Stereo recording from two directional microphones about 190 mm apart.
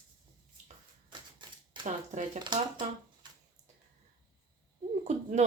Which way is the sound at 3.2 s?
25° right (ahead or behind).